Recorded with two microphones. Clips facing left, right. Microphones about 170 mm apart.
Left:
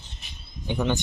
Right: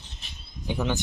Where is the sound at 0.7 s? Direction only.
5° right (ahead or behind).